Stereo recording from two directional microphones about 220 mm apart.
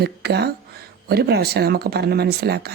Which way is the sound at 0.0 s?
45° right (ahead or behind).